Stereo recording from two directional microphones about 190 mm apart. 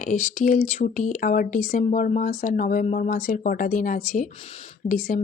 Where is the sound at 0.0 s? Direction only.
40° left (ahead or behind).